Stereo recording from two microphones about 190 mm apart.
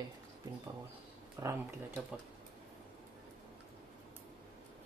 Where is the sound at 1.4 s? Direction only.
15° right (ahead or behind).